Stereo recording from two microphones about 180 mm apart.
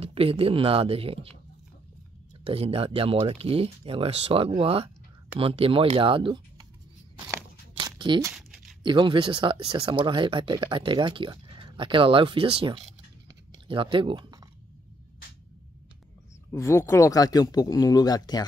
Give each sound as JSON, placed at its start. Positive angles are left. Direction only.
{"t": 0.0, "sound": "speech", "side_deg": -30}
{"t": 2.4, "sound": "speech", "side_deg": -35}
{"t": 7.8, "sound": "a sound", "side_deg": -25}
{"t": 8.8, "sound": "speech", "side_deg": -25}
{"t": 13.5, "sound": "chewing", "side_deg": -30}
{"t": 16.5, "sound": "speech", "side_deg": 15}